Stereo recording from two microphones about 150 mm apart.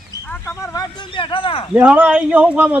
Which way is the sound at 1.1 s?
35° left (ahead or behind).